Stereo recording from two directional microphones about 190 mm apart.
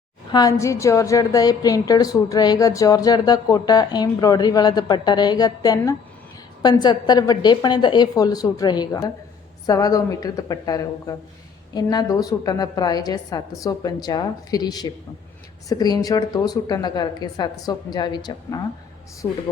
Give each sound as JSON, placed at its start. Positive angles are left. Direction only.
{"t": 0.3, "sound": "a woman's voice", "side_deg": 20}